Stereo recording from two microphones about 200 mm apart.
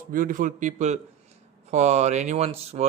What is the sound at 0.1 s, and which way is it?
Speech, 40° right (ahead or behind).